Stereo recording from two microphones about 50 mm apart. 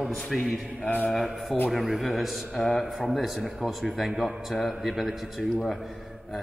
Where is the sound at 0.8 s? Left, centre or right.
Left.